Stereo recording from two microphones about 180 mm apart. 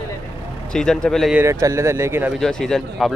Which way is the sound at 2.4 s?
5° left (ahead or behind).